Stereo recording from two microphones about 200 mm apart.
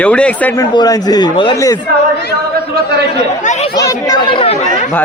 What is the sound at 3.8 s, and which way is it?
Speech, 20° left (ahead or behind).